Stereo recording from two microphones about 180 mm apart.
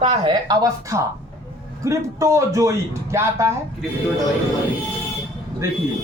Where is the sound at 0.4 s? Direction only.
20° right (ahead or behind).